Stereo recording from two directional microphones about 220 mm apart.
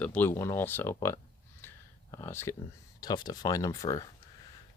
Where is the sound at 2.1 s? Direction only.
10° left (ahead or behind).